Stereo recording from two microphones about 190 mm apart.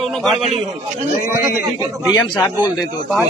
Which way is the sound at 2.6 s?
20° left (ahead or behind).